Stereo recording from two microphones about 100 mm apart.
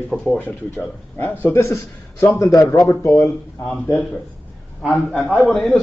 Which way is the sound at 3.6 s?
5° left (ahead or behind).